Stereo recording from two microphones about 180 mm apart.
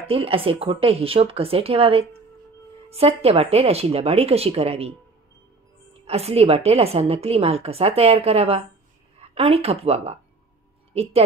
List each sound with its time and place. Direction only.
0.0 s a woman's voice: 30° right (ahead or behind)
6.0 s a woman's voice: 35° right (ahead or behind)